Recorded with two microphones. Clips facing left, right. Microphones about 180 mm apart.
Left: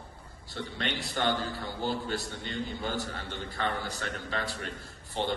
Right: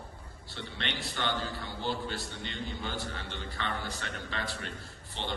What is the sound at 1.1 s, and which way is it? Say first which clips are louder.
A man's voice: left 4 dB; 40° left (ahead or behind).